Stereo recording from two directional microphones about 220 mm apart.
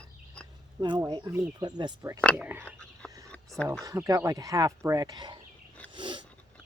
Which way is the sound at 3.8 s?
15° right (ahead or behind).